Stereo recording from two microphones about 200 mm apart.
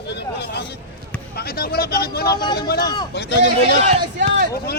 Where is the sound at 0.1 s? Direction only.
55° left (ahead or behind).